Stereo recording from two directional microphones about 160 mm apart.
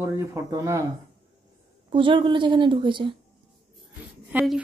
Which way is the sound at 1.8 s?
30° right (ahead or behind).